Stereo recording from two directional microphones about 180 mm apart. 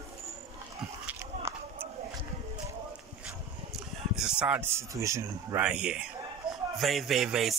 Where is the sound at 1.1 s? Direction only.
15° right (ahead or behind).